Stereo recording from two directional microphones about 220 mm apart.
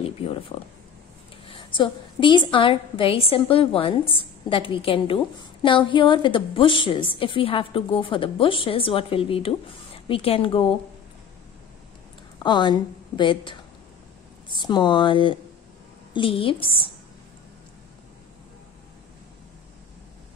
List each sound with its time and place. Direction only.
0.0 s a sound: 25° left (ahead or behind)
1.5 s a woman's voice: 20° left (ahead or behind)
12.4 s a woman's voice: 20° left (ahead or behind)
14.6 s a woman's voice: 20° left (ahead or behind)